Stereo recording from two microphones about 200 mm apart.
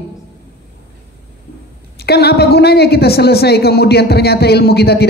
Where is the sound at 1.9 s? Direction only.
55° left (ahead or behind).